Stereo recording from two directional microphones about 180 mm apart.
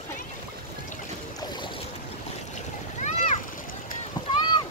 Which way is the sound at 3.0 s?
40° left (ahead or behind).